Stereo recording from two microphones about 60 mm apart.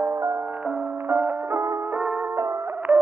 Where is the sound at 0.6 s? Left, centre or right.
Right.